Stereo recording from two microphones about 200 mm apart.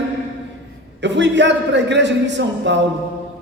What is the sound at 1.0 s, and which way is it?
A man's voice, 65° right (ahead or behind).